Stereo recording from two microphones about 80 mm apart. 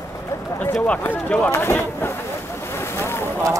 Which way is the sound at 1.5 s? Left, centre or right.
Left.